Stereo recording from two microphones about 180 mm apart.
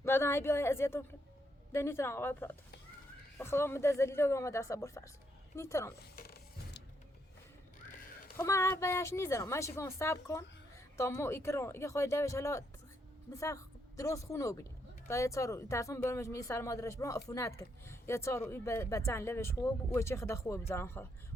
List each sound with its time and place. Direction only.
0.0 s speech: 15° left (ahead or behind)
6.1 s a sound: 55° left (ahead or behind)
8.4 s speech: 15° left (ahead or behind)